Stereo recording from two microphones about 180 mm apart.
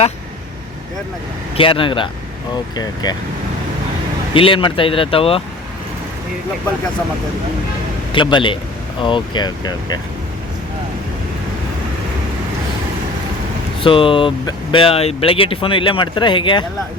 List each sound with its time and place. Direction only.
1.5 s speech: 30° left (ahead or behind)
4.4 s speech: 30° left (ahead or behind)
8.1 s speech: 25° left (ahead or behind)
13.8 s speech: 30° left (ahead or behind)